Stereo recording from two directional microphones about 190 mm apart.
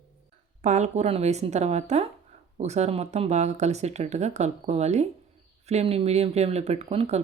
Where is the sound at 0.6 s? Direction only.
40° right (ahead or behind).